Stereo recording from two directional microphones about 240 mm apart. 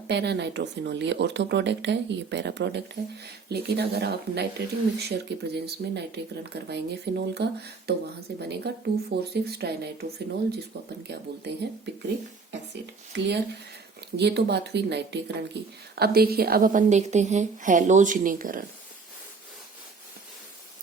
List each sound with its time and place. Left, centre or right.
0.1 s speech: right
11.1 s speech: right
13.1 s a woman's voice: right